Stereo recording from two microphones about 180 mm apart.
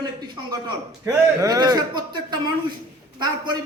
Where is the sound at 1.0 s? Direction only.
20° right (ahead or behind).